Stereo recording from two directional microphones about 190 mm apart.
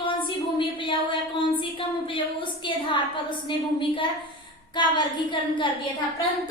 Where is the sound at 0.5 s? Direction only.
25° left (ahead or behind).